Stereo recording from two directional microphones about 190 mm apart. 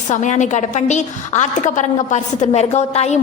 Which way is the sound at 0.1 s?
40° left (ahead or behind).